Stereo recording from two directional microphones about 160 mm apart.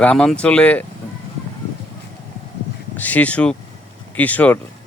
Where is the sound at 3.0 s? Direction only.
10° left (ahead or behind).